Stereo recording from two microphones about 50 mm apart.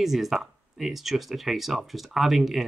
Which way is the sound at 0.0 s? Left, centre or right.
Centre.